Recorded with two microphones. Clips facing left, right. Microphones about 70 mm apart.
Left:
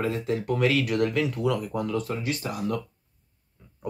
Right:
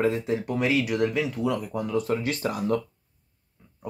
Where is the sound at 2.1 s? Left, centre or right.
Right.